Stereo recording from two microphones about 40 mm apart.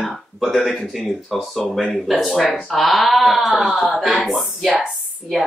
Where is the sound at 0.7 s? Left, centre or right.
Centre.